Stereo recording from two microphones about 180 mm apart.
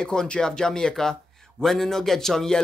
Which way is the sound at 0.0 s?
5° left (ahead or behind).